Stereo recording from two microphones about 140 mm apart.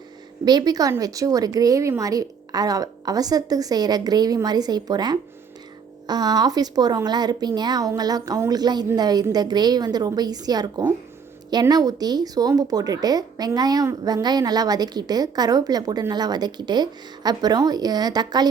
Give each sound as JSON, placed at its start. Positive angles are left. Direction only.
{"t": 0.4, "sound": "speech", "side_deg": -30}